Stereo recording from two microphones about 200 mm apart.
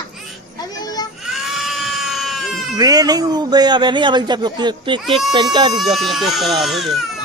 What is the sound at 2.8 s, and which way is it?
A man's voice, 20° right (ahead or behind).